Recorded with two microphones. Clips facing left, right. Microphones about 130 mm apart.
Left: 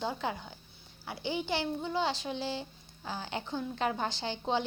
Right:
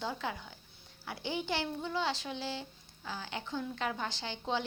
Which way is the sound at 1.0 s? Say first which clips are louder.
Left 2 dB; 15° left (ahead or behind).